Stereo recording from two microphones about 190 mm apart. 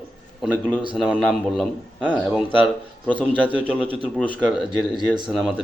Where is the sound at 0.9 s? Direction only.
5° right (ahead or behind).